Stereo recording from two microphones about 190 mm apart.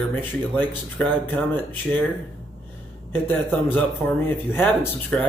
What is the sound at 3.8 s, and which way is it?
A man's voice, 10° left (ahead or behind).